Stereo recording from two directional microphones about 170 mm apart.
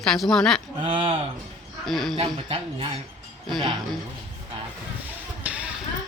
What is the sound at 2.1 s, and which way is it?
Speech, 30° right (ahead or behind).